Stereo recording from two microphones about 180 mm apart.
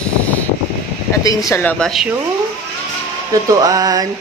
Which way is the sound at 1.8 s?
Centre (ahead or behind).